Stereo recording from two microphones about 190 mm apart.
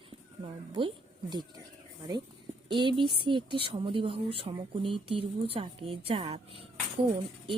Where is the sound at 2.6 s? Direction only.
25° right (ahead or behind).